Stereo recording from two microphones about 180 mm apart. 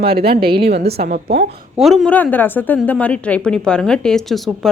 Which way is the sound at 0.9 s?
45° right (ahead or behind).